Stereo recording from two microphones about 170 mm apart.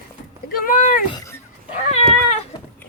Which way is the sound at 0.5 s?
55° left (ahead or behind).